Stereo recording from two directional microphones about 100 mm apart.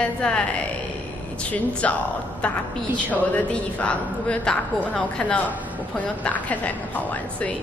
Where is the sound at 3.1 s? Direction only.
10° left (ahead or behind).